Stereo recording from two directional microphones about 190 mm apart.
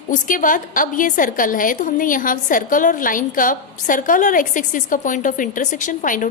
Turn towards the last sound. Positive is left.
turn(degrees=45)  # may be behind; listen again after turning